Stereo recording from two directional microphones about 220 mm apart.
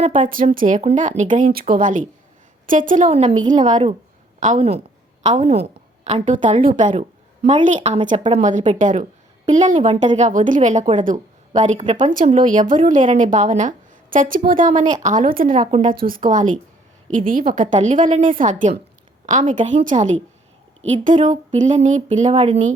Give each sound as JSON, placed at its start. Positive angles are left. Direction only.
{"t": 0.0, "sound": "a woman's voice", "side_deg": -35}
{"t": 7.8, "sound": "a woman's voice", "side_deg": -25}
{"t": 8.4, "sound": "a woman's voice", "side_deg": -35}